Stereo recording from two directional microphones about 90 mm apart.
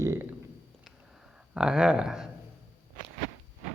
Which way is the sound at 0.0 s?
30° right (ahead or behind).